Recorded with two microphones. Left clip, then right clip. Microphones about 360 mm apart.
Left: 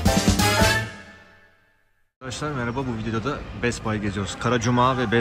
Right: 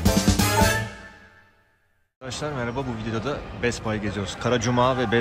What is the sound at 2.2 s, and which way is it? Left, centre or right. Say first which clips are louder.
Speech: left 1 dB; centre.